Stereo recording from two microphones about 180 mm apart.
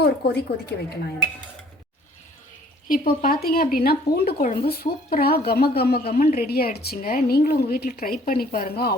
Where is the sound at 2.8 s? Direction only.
50° left (ahead or behind).